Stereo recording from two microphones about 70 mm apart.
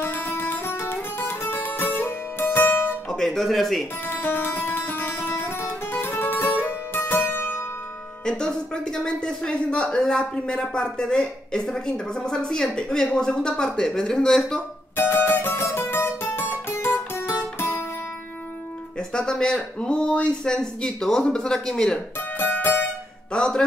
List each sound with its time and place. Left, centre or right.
0.0 s music: left
3.1 s speech: centre
4.0 s music: left
8.3 s speech: centre
15.0 s music: left
18.9 s speech: centre
22.4 s music: left
23.3 s music: centre